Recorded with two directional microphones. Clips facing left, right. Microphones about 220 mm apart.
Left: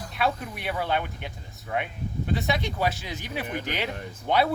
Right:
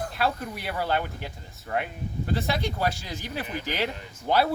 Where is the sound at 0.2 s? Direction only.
Centre (ahead or behind).